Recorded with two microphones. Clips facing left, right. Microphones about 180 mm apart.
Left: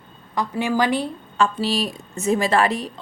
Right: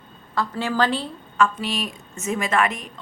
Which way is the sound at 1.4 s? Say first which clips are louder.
Left 2 dB; 30° left (ahead or behind).